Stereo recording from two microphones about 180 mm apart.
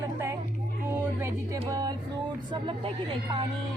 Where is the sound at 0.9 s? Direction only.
15° right (ahead or behind).